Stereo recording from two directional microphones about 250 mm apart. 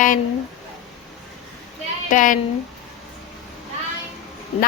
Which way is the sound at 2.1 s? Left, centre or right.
Left.